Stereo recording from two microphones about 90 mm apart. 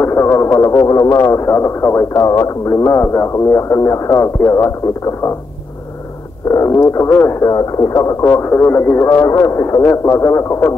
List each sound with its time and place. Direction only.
0.0 s speech: 25° left (ahead or behind)
6.5 s speech: 35° left (ahead or behind)